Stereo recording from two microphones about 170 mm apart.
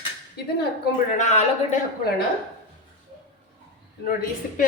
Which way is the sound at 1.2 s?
45° left (ahead or behind).